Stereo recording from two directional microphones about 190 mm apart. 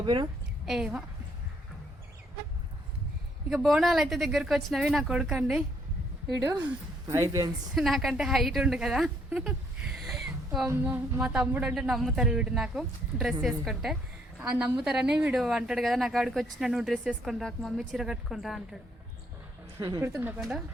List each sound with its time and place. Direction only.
0.0 s a woman's voice: 25° right (ahead or behind)
0.6 s a woman's voice: centre (ahead or behind)
3.5 s a woman's voice: 5° right (ahead or behind)
7.8 s a woman's voice: centre (ahead or behind)
10.2 s a sound: centre (ahead or behind)
10.7 s a woman's voice: 10° right (ahead or behind)
19.8 s a woman's voice: 15° right (ahead or behind)